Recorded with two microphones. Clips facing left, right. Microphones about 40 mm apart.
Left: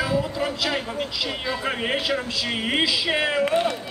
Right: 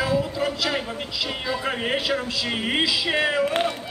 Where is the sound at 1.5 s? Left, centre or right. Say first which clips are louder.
Even; centre.